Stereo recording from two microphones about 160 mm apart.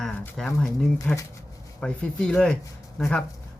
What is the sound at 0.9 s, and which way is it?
Speech, 20° left (ahead or behind).